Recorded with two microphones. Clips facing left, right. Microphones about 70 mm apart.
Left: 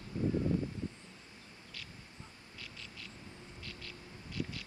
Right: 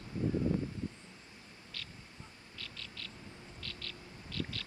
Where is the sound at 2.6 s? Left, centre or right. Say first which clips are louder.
Right 2 dB; centre.